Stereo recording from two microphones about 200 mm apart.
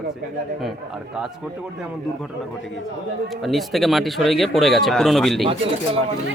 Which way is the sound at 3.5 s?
Centre (ahead or behind).